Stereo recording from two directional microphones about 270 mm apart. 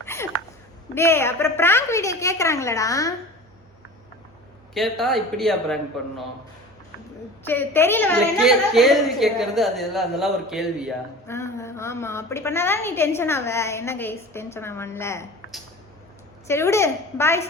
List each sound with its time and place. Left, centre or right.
0.0 s a sound: centre
0.9 s a woman's voice: centre
4.7 s a woman's voice: centre
7.4 s a woman's voice: centre
11.3 s a woman's voice: centre
16.5 s a woman's voice: centre